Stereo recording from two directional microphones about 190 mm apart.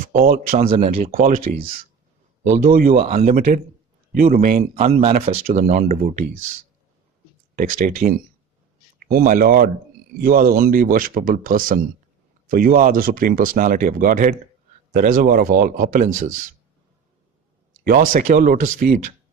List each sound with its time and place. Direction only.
0.1 s speech: 45° right (ahead or behind)
0.7 s speech: 30° right (ahead or behind)
1.1 s speech: 50° right (ahead or behind)
4.7 s speech: 30° right (ahead or behind)
7.5 s speech: 45° right (ahead or behind)
18.1 s speech: 50° right (ahead or behind)